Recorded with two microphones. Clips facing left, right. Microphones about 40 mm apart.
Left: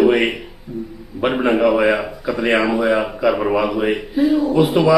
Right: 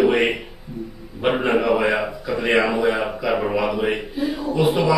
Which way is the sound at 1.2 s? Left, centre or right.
Centre.